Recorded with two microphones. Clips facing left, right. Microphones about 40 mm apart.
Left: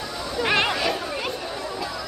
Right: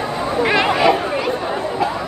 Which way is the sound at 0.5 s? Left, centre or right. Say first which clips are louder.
Right 7 dB; right.